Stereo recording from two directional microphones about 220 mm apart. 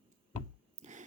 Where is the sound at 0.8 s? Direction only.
35° right (ahead or behind).